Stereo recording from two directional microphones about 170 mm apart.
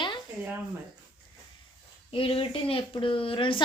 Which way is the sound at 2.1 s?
35° left (ahead or behind).